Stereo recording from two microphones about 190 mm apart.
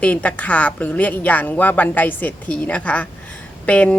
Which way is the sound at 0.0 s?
5° left (ahead or behind).